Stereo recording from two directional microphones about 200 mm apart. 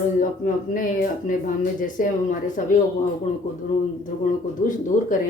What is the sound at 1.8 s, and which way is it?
Speech, 40° left (ahead or behind).